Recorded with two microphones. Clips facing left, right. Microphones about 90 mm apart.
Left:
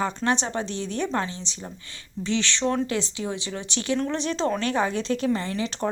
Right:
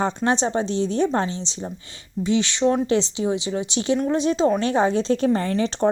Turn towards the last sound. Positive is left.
turn(degrees=-35)  # may be behind; listen again after turning